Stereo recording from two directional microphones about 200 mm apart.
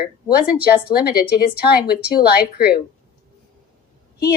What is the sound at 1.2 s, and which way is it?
A woman's voice, 50° left (ahead or behind).